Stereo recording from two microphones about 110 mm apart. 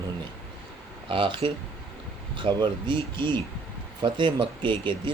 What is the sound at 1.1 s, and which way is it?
Speech, 50° right (ahead or behind).